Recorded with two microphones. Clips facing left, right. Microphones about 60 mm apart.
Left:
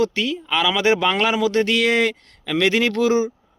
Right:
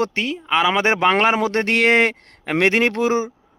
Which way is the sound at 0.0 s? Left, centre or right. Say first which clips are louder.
Left 1 dB; right.